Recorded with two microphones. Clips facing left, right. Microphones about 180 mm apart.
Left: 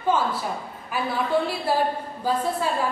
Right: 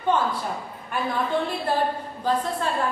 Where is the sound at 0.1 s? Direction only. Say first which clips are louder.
Even; 5° left (ahead or behind).